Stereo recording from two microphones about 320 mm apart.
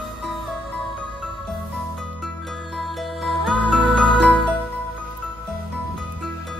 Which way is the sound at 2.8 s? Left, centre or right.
Centre.